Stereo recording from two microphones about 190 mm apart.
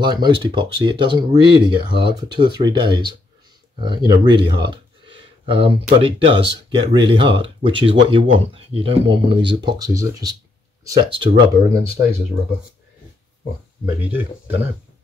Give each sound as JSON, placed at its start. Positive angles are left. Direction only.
{"t": 0.0, "sound": "speech", "side_deg": -25}